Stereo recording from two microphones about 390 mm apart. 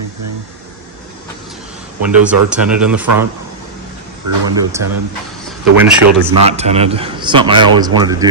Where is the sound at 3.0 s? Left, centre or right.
Right.